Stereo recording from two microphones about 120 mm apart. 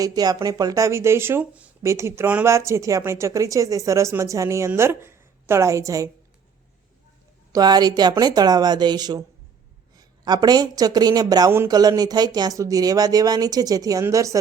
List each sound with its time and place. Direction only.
0.0 s speech: 30° right (ahead or behind)
7.5 s a woman's voice: 35° right (ahead or behind)